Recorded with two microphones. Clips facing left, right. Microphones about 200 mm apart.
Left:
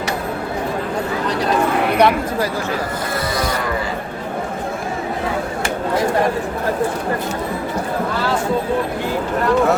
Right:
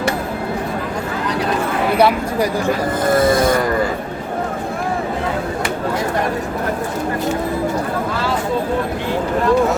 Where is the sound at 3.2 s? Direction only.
50° right (ahead or behind).